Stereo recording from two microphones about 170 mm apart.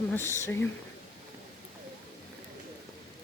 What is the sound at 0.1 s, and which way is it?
Speech, 15° left (ahead or behind).